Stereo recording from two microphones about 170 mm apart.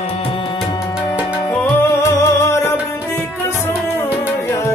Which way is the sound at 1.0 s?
15° left (ahead or behind).